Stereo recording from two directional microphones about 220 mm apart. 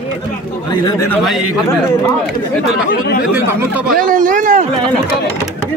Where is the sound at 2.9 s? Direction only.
45° left (ahead or behind).